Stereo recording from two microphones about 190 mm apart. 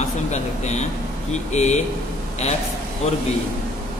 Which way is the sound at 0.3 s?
35° left (ahead or behind).